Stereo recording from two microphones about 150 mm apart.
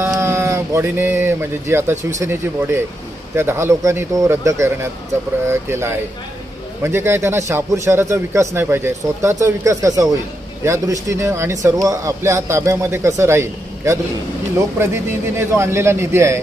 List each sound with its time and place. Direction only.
0.0 s a man's voice: 15° right (ahead or behind)